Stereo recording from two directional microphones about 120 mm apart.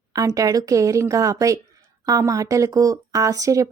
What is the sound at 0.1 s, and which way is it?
Speech, 30° right (ahead or behind).